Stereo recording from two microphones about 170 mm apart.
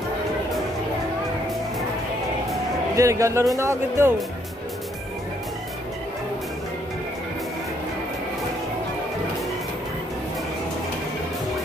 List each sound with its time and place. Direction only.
3.0 s speech: 20° right (ahead or behind)